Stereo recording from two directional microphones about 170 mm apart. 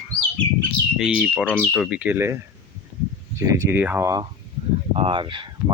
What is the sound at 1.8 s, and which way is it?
Speech, 5° right (ahead or behind).